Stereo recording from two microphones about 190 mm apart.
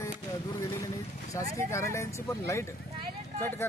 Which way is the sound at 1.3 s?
15° left (ahead or behind).